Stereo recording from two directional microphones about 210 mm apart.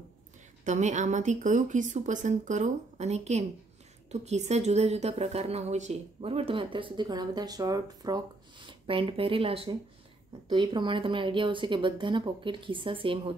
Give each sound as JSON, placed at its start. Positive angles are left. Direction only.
{"t": 0.7, "sound": "a woman's voice", "side_deg": -35}